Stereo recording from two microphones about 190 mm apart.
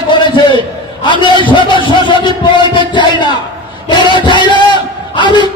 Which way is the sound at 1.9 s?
25° left (ahead or behind).